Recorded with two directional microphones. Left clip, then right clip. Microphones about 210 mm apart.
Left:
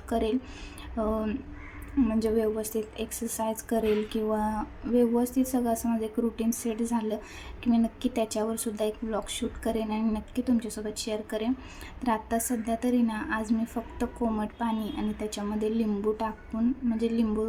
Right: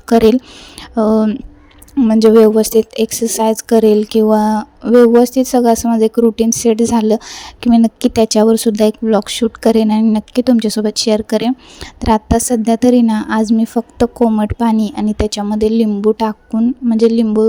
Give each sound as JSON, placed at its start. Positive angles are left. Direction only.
{"t": 0.1, "sound": "speech", "side_deg": -50}
{"t": 0.8, "sound": "a sound", "side_deg": -45}
{"t": 2.0, "sound": "speech", "side_deg": -45}